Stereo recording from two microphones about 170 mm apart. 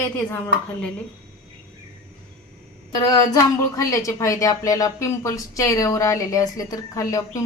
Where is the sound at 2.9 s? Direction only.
20° left (ahead or behind).